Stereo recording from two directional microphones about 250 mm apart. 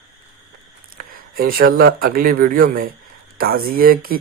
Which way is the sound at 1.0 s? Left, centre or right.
Right.